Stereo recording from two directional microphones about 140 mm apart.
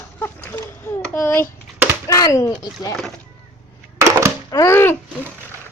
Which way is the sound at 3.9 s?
20° right (ahead or behind).